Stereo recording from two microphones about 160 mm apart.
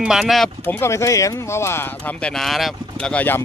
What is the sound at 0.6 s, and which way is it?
Speech, 15° left (ahead or behind).